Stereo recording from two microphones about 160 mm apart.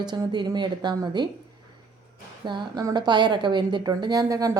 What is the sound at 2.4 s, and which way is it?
A woman's voice, 30° right (ahead or behind).